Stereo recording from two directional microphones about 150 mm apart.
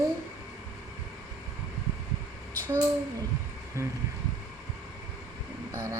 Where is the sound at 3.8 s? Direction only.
20° right (ahead or behind).